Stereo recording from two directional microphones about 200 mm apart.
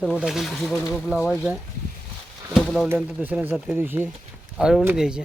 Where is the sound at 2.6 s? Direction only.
Centre (ahead or behind).